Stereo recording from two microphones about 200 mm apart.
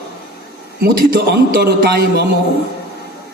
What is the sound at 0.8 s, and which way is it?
A man's voice, 50° right (ahead or behind).